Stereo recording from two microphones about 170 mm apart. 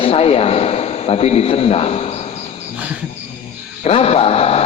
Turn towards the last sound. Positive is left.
turn(degrees=35)  # may be behind; listen again after turning